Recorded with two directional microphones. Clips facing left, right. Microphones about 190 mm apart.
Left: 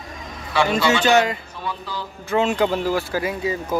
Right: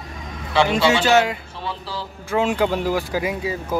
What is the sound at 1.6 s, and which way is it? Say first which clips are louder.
Speech: even; 30° right (ahead or behind).